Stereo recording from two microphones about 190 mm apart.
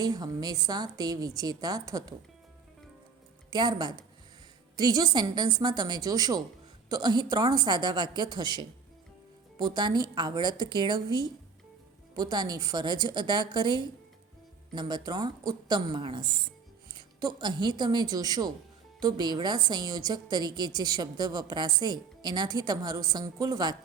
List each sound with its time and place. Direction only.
0.0 s a woman's voice: 20° right (ahead or behind)
3.5 s a woman's voice: 25° right (ahead or behind)